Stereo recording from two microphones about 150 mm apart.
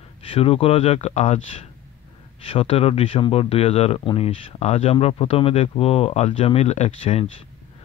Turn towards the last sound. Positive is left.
turn(degrees=45)  # may be behind; listen again after turning